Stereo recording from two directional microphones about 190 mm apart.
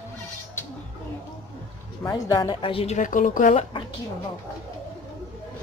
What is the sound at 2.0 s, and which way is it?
A woman's voice, 20° left (ahead or behind).